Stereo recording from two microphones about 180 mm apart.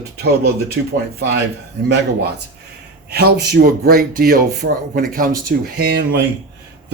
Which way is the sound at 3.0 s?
60° right (ahead or behind).